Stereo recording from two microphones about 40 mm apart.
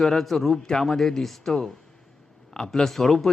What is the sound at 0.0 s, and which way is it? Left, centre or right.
A man's voice, centre.